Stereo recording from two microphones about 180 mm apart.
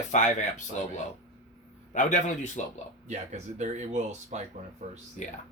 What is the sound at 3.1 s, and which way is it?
Speech, 40° right (ahead or behind).